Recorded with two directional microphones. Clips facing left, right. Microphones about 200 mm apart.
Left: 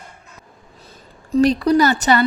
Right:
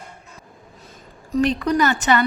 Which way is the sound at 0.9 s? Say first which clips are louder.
Left 5 dB; 35° left (ahead or behind).